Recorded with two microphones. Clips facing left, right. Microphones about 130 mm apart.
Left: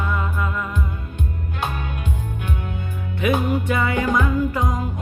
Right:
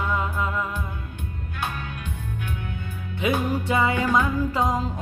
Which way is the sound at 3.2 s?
20° right (ahead or behind).